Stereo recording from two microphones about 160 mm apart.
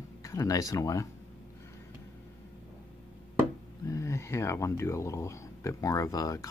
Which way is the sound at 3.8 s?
20° left (ahead or behind).